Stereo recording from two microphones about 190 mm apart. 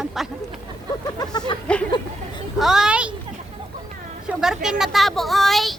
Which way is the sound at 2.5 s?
Centre (ahead or behind).